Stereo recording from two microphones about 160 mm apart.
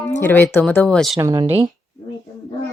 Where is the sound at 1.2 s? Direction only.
20° right (ahead or behind).